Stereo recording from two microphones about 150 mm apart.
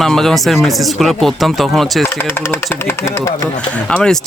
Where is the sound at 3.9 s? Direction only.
5° left (ahead or behind).